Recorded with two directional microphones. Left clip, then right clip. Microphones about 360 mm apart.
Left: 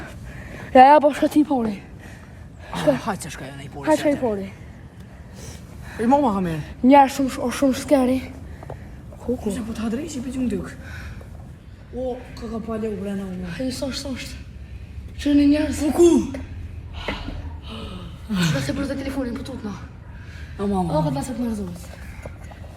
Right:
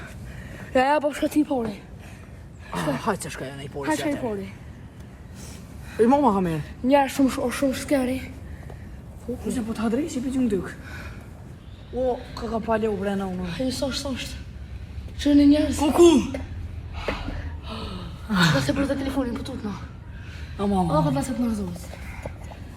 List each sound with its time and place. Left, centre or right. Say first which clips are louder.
0.5 s a woman's voice: left 9 dB; centre
2.7 s speech: left 5 dB; centre
3.8 s a woman's voice: left 7 dB; left
6.0 s speech: even; centre
6.8 s a woman's voice: left 6 dB; left
7.2 s a woman's voice: right 2 dB; centre
7.4 s a woman's voice: left 3 dB; centre
9.5 s a woman's voice: right 1 dB; centre
17.0 s snort: even; centre
17.8 s a sound: right 1 dB; centre
18.7 s speech: right 2 dB; centre